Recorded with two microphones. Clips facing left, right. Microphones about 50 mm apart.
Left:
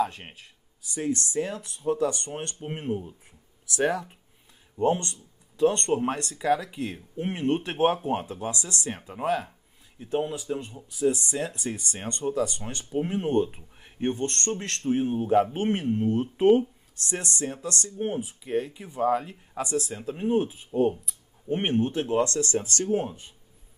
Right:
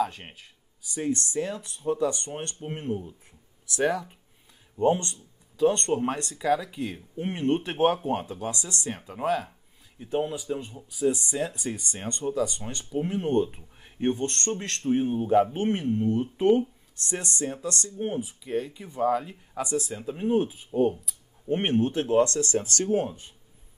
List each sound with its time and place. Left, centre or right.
0.0 s speech: centre
2.7 s speech: centre
4.7 s speech: centre
19.6 s speech: centre
20.7 s speech: centre
21.5 s speech: centre